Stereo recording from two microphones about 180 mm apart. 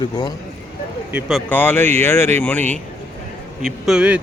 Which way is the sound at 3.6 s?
Centre (ahead or behind).